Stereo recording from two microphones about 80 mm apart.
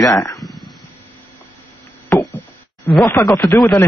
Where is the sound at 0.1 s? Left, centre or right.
Left.